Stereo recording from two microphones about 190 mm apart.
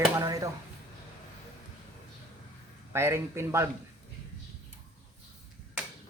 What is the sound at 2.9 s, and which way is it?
Speech, 15° right (ahead or behind).